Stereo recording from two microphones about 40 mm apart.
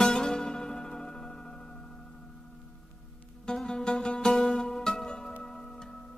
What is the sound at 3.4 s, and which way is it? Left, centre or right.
Music, centre.